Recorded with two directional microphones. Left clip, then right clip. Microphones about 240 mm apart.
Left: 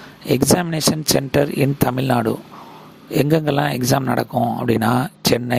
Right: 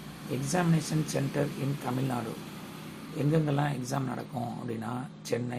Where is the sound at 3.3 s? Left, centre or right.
Left.